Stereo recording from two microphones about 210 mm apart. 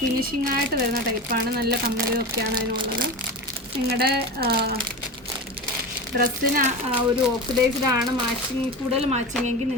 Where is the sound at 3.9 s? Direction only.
50° right (ahead or behind).